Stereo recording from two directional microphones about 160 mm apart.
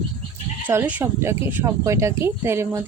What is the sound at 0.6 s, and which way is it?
Speech, 10° right (ahead or behind).